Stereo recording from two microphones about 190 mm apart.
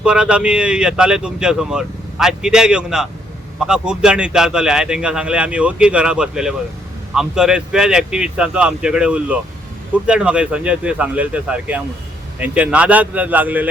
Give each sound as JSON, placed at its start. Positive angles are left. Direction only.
{"t": 0.0, "sound": "speech", "side_deg": -5}